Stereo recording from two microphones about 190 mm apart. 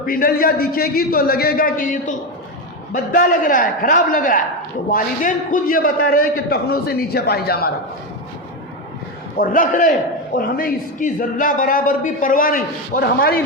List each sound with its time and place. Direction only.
0.0 s a man's voice: 50° left (ahead or behind)
9.4 s a man's voice: 45° left (ahead or behind)